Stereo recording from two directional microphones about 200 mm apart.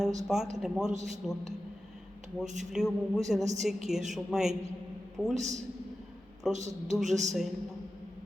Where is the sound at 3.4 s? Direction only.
35° right (ahead or behind).